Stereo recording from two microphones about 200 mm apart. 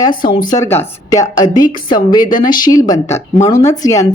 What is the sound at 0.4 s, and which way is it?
Speech, 15° left (ahead or behind).